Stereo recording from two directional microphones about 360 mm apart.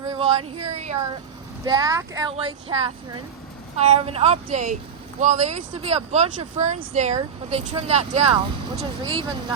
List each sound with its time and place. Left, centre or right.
0.1 s speech: centre